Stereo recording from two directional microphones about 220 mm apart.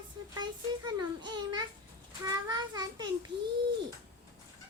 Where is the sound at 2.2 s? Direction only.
20° right (ahead or behind).